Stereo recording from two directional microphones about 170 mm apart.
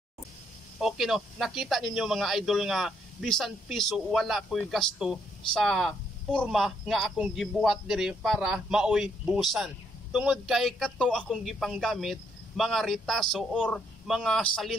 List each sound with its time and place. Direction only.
0.7 s speech: centre (ahead or behind)